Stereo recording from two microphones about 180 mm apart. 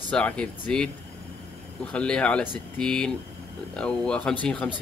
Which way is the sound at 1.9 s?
5° left (ahead or behind).